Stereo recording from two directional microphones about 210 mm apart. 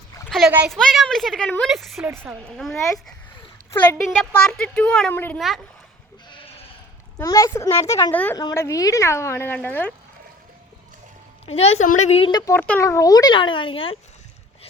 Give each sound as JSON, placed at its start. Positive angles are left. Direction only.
{"t": 0.3, "sound": "a woman's voice", "side_deg": 0}
{"t": 7.2, "sound": "speech", "side_deg": 15}
{"t": 11.4, "sound": "a woman's voice", "side_deg": 30}
{"t": 12.1, "sound": "speech", "side_deg": 20}